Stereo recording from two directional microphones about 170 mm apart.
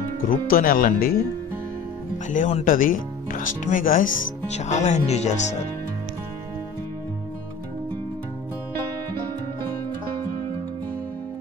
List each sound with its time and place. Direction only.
0.3 s speech: 55° left (ahead or behind)
2.2 s speech: 45° left (ahead or behind)
4.5 s speech: 40° left (ahead or behind)